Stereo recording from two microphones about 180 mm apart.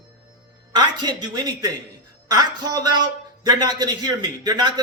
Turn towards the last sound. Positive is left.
turn(degrees=-25)  # may be behind; listen again after turning